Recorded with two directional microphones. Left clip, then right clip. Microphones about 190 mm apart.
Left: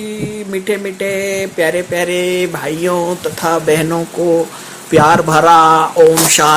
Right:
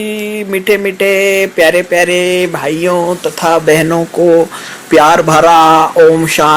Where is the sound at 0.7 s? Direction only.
25° right (ahead or behind).